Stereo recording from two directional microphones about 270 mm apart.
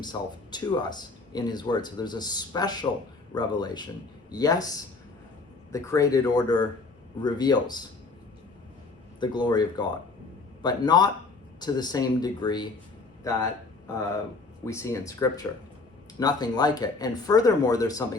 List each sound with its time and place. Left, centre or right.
0.0 s speech: centre
5.7 s speech: centre
9.2 s speech: centre
14.6 s speech: centre